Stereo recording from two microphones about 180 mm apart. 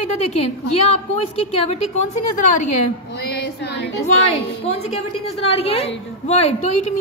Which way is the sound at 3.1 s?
65° left (ahead or behind).